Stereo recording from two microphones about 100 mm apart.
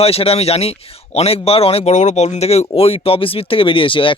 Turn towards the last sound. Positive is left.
turn(degrees=60)  # may be behind; listen again after turning